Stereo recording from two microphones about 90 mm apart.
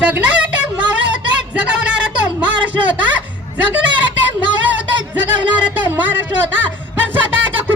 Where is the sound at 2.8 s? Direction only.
15° right (ahead or behind).